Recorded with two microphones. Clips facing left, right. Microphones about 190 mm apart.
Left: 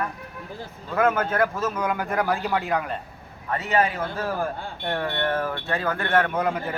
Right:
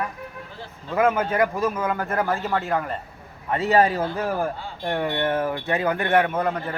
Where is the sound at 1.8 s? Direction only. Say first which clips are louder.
Right 1 dB; centre (ahead or behind).